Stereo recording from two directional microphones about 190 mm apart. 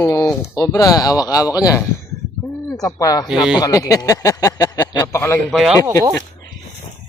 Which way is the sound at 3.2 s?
5° right (ahead or behind).